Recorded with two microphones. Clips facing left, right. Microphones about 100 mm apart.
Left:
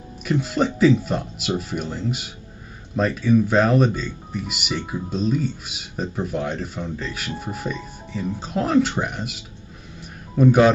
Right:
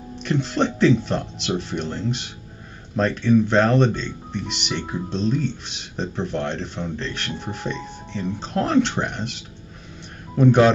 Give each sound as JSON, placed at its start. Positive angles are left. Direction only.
{"t": 0.2, "sound": "speech", "side_deg": 5}